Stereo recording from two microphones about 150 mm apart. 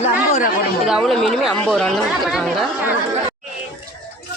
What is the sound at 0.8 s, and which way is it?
Speech, centre (ahead or behind).